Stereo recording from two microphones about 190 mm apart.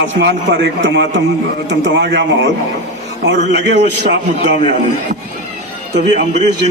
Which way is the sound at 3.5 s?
65° right (ahead or behind).